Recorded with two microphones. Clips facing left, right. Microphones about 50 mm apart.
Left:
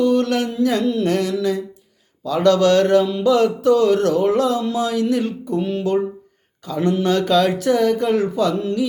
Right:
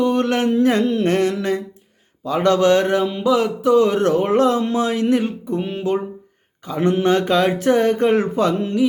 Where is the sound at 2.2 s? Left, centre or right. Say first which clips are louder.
Left 1 dB; right.